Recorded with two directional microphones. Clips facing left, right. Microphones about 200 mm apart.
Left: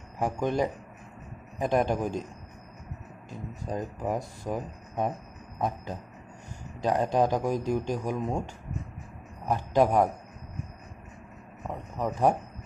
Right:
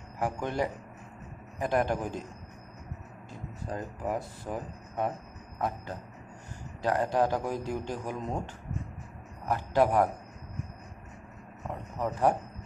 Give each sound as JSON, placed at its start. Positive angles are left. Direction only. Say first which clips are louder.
{"t": 0.2, "sound": "speech", "louder": "left 4 dB", "side_deg": 15}
{"t": 3.3, "sound": "speech", "louder": "left 3 dB", "side_deg": 15}
{"t": 6.8, "sound": "speech", "louder": "left 2 dB", "side_deg": 20}
{"t": 9.5, "sound": "speech", "louder": "left 2 dB", "side_deg": 15}
{"t": 12.0, "sound": "speech", "louder": "left 2 dB", "side_deg": 15}